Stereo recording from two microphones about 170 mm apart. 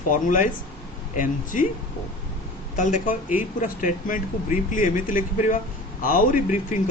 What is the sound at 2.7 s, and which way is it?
Speech, 45° left (ahead or behind).